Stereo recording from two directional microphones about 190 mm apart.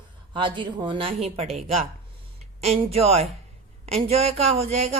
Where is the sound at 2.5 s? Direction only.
35° right (ahead or behind).